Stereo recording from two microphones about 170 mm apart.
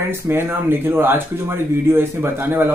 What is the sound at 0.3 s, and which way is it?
Speech, 15° right (ahead or behind).